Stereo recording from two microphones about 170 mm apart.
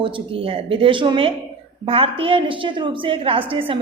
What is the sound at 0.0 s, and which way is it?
A woman's voice, 35° right (ahead or behind).